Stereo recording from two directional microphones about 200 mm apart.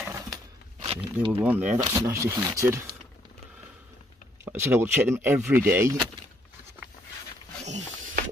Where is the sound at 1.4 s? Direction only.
5° right (ahead or behind).